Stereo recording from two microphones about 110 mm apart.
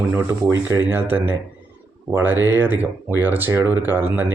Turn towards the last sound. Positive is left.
turn(degrees=-20)  # may be behind; listen again after turning